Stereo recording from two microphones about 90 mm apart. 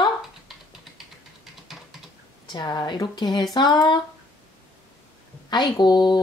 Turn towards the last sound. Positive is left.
turn(degrees=55)  # may be behind; listen again after turning